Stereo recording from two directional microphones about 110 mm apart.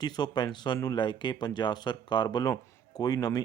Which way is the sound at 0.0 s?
40° left (ahead or behind).